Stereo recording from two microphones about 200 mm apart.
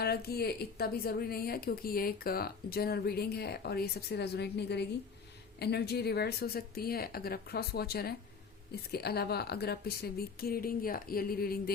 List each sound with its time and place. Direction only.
0.0 s a woman's voice: 50° left (ahead or behind)